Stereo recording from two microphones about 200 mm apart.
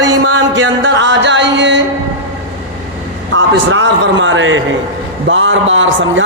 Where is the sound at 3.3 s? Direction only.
65° right (ahead or behind).